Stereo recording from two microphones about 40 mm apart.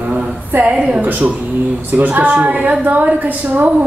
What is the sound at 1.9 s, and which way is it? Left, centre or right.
A woman's voice, right.